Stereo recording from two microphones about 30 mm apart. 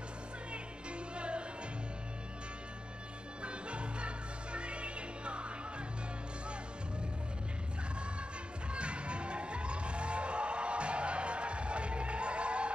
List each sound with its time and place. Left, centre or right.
1.1 s music: right
3.4 s music: right
8.7 s crowd: right